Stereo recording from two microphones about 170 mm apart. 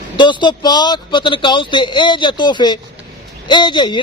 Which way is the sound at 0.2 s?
25° left (ahead or behind).